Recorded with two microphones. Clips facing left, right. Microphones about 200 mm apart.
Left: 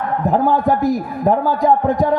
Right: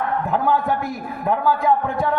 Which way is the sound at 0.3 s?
40° left (ahead or behind).